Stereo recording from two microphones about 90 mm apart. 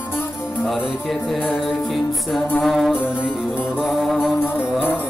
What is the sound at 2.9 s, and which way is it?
Music, 25° left (ahead or behind).